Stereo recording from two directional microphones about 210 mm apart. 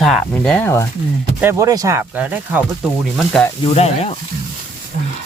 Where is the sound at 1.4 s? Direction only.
10° right (ahead or behind).